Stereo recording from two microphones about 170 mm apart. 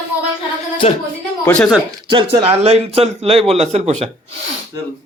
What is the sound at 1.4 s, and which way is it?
Speech, 5° left (ahead or behind).